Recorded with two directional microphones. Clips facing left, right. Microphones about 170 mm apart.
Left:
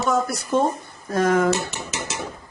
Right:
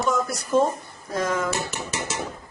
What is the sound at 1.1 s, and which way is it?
Speech, 55° left (ahead or behind).